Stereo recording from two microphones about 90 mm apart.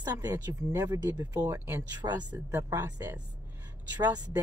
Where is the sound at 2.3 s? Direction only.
25° right (ahead or behind).